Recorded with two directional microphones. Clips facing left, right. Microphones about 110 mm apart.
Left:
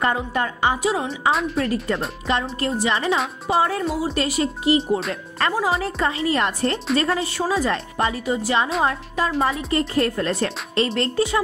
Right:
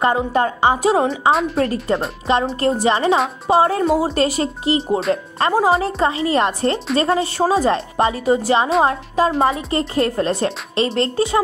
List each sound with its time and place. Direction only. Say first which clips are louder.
0.0 s speech: right 5 dB; 30° right (ahead or behind)
0.8 s speech: right 7 dB; 40° right (ahead or behind)
1.3 s a woman's voice: right 4 dB; centre (ahead or behind)
1.6 s speech: right 4 dB; 30° right (ahead or behind)